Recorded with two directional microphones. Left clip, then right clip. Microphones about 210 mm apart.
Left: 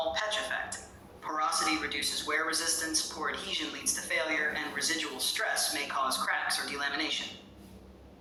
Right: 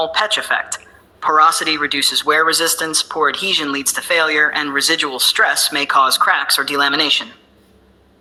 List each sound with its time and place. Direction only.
0.1 s speech: 45° right (ahead or behind)